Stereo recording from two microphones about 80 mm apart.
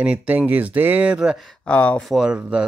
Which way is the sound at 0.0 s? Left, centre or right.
Centre.